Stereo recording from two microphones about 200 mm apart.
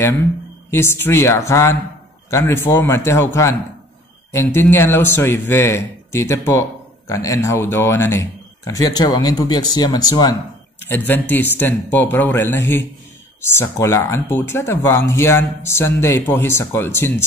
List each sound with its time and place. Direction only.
0.7 s speech: 10° left (ahead or behind)